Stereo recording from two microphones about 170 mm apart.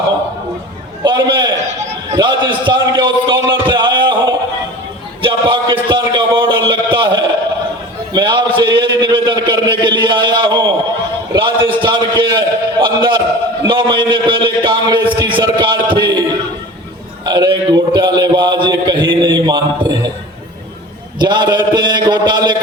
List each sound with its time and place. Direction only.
1.0 s a sound: 25° right (ahead or behind)
2.0 s a man's voice: 25° right (ahead or behind)
5.2 s a man's voice: 30° right (ahead or behind)
17.2 s a man's voice: 25° right (ahead or behind)
21.2 s a man's voice: 25° right (ahead or behind)